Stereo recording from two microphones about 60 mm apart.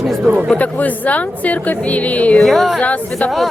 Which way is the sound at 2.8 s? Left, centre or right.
Left.